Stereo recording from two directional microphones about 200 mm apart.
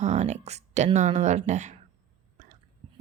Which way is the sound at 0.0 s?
35° right (ahead or behind).